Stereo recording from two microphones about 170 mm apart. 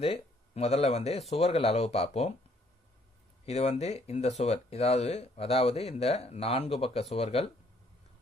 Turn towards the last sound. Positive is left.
turn(degrees=35)  # may be behind; listen again after turning